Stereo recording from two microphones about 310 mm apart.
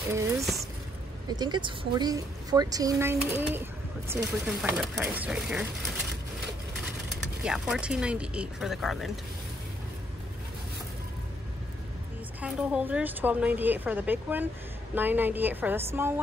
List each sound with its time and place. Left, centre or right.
0.1 s a woman's voice: centre
7.4 s a woman's voice: centre
12.4 s a woman's voice: centre